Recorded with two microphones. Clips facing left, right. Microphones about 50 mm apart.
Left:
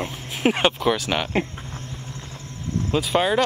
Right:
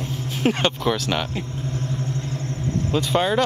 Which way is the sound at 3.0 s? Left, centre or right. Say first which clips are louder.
Left 1 dB; centre.